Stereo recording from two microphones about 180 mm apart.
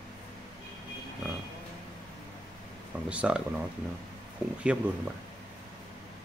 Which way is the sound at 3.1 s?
5° right (ahead or behind).